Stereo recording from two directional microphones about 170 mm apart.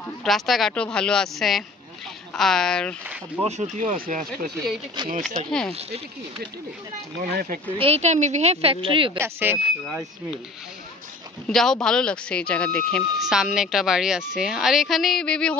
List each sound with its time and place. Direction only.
0.0 s speech: centre (ahead or behind)
3.4 s speech: 40° right (ahead or behind)
5.5 s speech: 5° left (ahead or behind)
7.2 s speech: 60° right (ahead or behind)
7.8 s a woman's voice: 40° right (ahead or behind)
9.2 s speech: 10° right (ahead or behind)
11.4 s speech: 5° left (ahead or behind)